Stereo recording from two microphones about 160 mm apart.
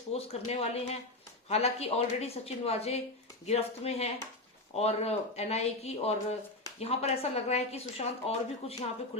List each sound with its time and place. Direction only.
0.1 s speech: 40° left (ahead or behind)